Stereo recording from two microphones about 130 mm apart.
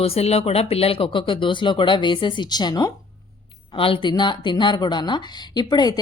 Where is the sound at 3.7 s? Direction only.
40° left (ahead or behind).